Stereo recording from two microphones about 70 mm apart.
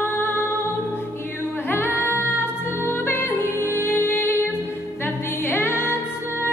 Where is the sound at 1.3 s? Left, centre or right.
Left.